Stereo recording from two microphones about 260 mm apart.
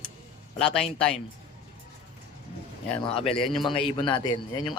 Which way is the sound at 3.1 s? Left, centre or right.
Left.